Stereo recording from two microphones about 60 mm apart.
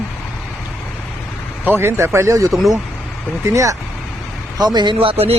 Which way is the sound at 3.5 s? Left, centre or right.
Right.